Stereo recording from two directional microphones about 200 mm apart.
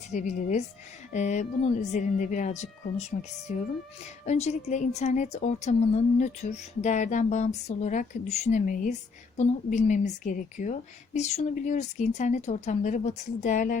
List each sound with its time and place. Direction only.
0.1 s a woman's voice: 35° left (ahead or behind)